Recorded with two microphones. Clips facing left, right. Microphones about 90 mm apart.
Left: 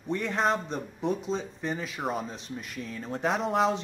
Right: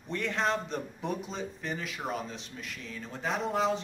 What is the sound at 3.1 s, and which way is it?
Speech, 65° left (ahead or behind).